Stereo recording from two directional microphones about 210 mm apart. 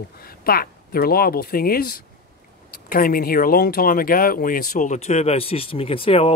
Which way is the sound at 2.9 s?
45° left (ahead or behind).